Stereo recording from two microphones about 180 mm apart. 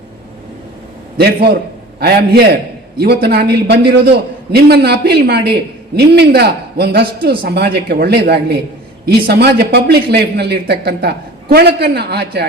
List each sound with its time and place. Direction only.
1.2 s a man's voice: 60° right (ahead or behind)